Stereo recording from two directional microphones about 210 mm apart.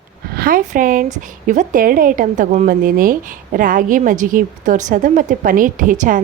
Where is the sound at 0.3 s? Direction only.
40° right (ahead or behind).